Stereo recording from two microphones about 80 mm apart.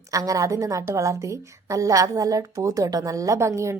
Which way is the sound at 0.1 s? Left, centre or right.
Right.